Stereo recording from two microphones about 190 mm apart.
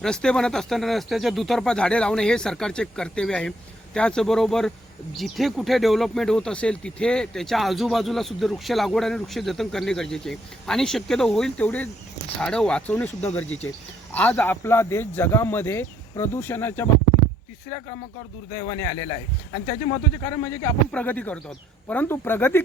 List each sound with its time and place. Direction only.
0.0 s a man's voice: 5° left (ahead or behind)
18.5 s a man's voice: 20° left (ahead or behind)